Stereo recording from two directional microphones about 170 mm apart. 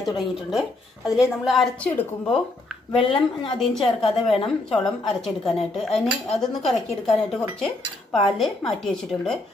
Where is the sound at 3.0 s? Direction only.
30° left (ahead or behind).